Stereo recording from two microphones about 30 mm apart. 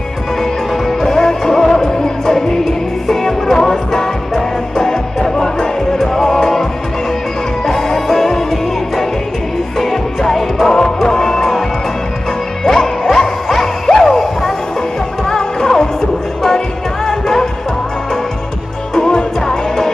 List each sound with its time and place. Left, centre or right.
0.7 s music: centre
9.7 s music: centre
12.6 s music: centre
15.3 s music: centre
18.9 s music: centre